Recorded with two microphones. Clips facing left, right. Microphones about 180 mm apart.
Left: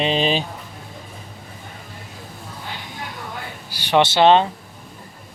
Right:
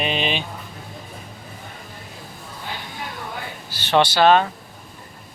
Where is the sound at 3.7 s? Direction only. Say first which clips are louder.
Left 1 dB; 15° left (ahead or behind).